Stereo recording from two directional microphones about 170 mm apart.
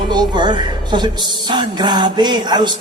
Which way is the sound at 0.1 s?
25° right (ahead or behind).